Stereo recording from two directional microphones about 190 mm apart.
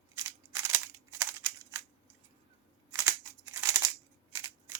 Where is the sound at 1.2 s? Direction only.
15° right (ahead or behind).